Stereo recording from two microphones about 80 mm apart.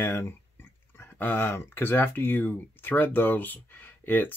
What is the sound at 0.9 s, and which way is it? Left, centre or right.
Speech, left.